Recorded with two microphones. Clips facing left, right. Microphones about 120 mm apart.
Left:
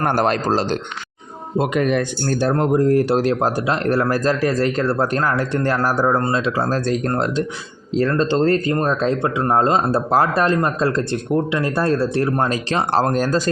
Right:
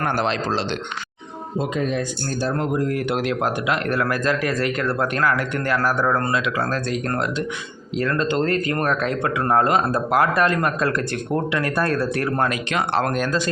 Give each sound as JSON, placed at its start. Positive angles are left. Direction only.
{"t": 0.0, "sound": "speech", "side_deg": 45}
{"t": 1.5, "sound": "speech", "side_deg": 65}